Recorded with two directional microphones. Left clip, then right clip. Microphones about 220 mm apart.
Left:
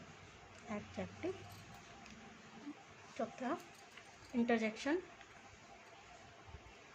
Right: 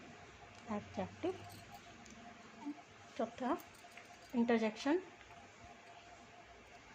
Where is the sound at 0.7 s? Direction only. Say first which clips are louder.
Right 2 dB; 20° right (ahead or behind).